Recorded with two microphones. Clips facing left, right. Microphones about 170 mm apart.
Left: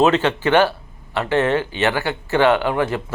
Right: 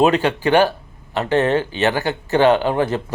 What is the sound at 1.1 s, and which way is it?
Speech, 40° right (ahead or behind).